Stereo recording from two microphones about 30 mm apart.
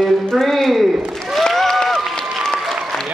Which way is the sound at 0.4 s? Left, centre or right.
Centre.